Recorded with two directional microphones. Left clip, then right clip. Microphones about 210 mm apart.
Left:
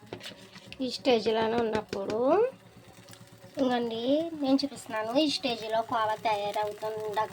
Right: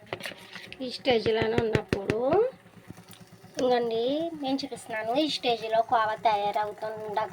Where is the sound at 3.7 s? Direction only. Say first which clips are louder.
Right 4 dB; 15° left (ahead or behind).